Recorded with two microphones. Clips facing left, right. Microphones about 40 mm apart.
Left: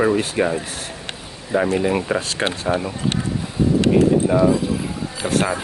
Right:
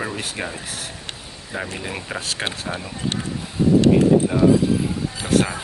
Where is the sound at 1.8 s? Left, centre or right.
Centre.